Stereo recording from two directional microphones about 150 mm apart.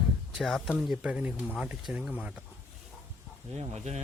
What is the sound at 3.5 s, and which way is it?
Speech, 45° right (ahead or behind).